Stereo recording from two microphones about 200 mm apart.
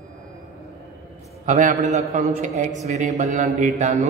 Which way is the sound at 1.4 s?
40° right (ahead or behind).